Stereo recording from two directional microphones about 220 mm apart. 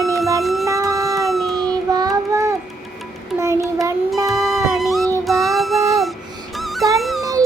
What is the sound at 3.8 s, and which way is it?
Music, 15° right (ahead or behind).